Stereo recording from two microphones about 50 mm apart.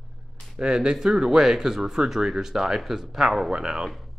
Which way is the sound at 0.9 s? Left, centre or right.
Centre.